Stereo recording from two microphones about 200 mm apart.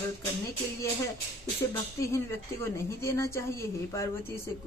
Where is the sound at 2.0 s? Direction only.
15° left (ahead or behind).